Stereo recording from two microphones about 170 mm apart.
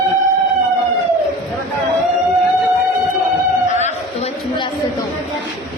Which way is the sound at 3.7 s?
45° left (ahead or behind).